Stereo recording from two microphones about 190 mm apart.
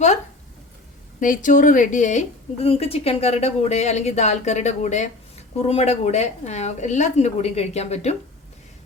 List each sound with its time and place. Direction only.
1.2 s a woman's voice: 45° left (ahead or behind)